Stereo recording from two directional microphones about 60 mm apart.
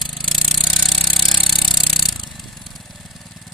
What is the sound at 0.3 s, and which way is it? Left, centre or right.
Jackhammer, centre.